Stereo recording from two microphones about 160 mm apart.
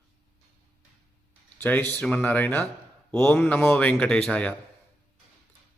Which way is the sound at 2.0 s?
10° left (ahead or behind).